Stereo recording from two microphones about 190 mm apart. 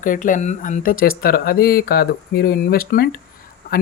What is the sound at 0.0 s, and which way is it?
Speech, 45° left (ahead or behind).